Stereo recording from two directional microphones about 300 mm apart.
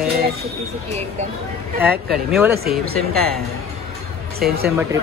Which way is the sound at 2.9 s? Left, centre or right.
Right.